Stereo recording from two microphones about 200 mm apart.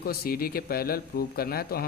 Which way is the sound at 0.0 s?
50° left (ahead or behind).